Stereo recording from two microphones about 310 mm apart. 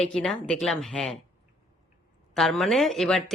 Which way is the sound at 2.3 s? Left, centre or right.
Centre.